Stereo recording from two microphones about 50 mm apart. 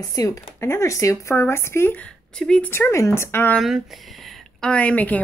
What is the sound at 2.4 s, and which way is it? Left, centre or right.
Speech, centre.